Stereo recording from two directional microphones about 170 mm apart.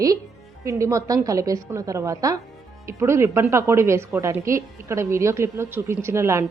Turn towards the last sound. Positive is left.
turn(degrees=-15)  # may be behind; listen again after turning